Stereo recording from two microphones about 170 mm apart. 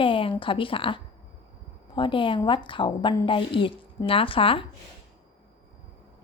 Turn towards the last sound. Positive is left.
turn(degrees=30)  # may be behind; listen again after turning